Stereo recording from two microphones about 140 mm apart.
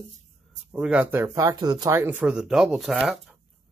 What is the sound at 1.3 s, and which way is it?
Speech, 25° right (ahead or behind).